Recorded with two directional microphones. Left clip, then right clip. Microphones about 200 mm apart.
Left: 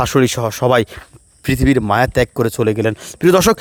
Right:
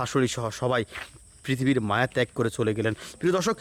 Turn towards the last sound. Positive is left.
turn(degrees=45)  # may be behind; listen again after turning